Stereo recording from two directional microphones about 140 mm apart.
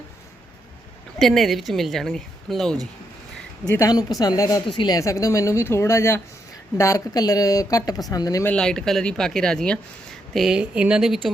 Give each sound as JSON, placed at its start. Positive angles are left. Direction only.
{"t": 1.2, "sound": "speech", "side_deg": 0}
{"t": 3.8, "sound": "speech", "side_deg": 25}
{"t": 4.6, "sound": "speech", "side_deg": 35}
{"t": 4.9, "sound": "speech", "side_deg": 20}
{"t": 8.4, "sound": "speech", "side_deg": 5}